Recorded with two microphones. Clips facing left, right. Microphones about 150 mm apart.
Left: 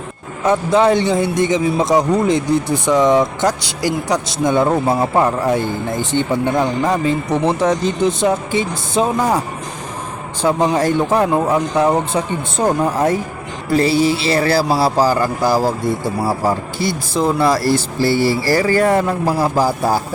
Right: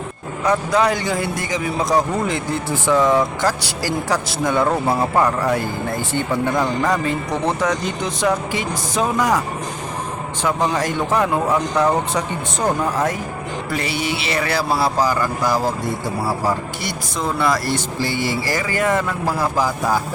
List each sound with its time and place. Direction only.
0.4 s a man's voice: 25° left (ahead or behind)
10.6 s a man's voice: 25° left (ahead or behind)
16.8 s a man's voice: 30° left (ahead or behind)